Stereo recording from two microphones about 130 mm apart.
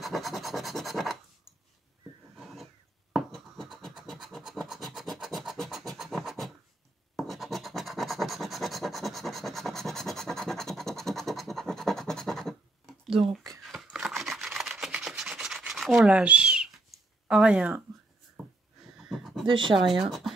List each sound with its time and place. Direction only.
0.0 s scratch: centre (ahead or behind)
2.3 s scratch: centre (ahead or behind)
13.6 s a sound: centre (ahead or behind)
15.0 s rub: 5° right (ahead or behind)
17.3 s speech: 5° right (ahead or behind)
18.9 s neigh: centre (ahead or behind)
19.5 s speech: 40° right (ahead or behind)
19.9 s speech: centre (ahead or behind)